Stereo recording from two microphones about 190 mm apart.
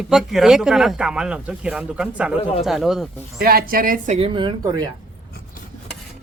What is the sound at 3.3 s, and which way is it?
Speech, 50° right (ahead or behind).